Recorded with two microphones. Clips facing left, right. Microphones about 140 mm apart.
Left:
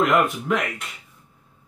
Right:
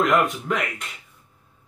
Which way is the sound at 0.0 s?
Centre (ahead or behind).